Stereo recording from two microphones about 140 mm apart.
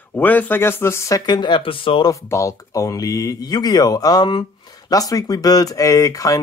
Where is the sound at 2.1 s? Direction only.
20° left (ahead or behind).